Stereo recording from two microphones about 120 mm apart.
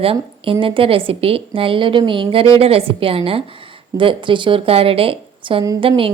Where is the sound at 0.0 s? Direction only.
50° right (ahead or behind).